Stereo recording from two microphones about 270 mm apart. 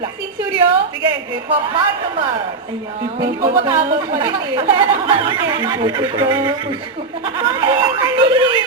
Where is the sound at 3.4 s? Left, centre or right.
Centre.